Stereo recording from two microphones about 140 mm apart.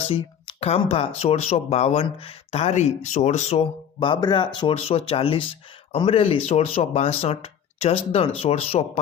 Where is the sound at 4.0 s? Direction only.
35° left (ahead or behind).